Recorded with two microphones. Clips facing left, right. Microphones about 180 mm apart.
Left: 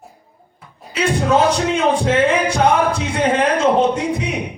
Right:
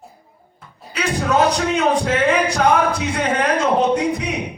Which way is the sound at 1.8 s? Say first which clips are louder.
Left 2 dB; 25° left (ahead or behind).